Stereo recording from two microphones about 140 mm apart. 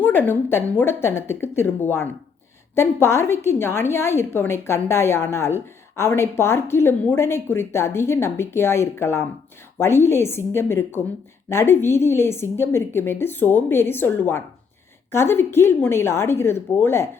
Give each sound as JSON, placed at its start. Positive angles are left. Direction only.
{"t": 0.0, "sound": "a woman's voice", "side_deg": 15}